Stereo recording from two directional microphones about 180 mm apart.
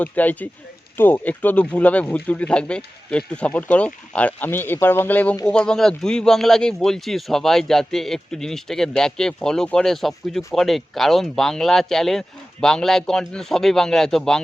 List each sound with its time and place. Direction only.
0.0 s speech: 10° left (ahead or behind)